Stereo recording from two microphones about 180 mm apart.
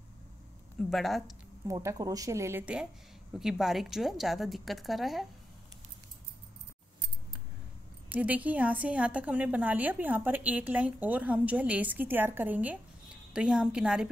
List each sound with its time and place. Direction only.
0.7 s speech: centre (ahead or behind)
1.7 s a woman's voice: 15° right (ahead or behind); by 5.3 s centre (ahead or behind)
8.1 s a woman's voice: 10° right (ahead or behind)